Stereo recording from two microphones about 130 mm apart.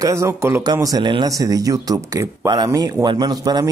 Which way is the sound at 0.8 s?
35° right (ahead or behind).